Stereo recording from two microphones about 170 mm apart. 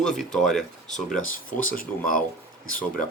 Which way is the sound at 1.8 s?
50° left (ahead or behind).